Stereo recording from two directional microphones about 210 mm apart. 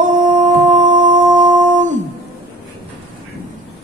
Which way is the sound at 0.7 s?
35° right (ahead or behind).